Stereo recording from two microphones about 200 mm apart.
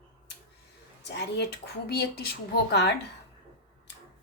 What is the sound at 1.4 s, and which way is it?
A woman's voice, 55° left (ahead or behind).